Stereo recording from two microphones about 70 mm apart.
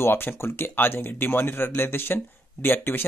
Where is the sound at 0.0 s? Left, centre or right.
Left.